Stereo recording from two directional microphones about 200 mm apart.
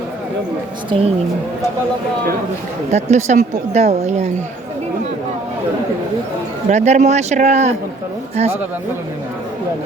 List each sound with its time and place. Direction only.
0.9 s a woman's voice: 30° right (ahead or behind)
2.9 s speech: 35° right (ahead or behind)
6.7 s speech: 35° right (ahead or behind)